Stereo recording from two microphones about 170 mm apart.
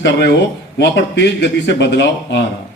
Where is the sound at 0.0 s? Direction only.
80° left.